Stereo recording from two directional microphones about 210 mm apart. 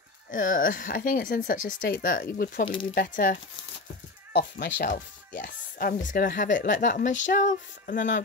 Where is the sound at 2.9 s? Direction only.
40° left (ahead or behind).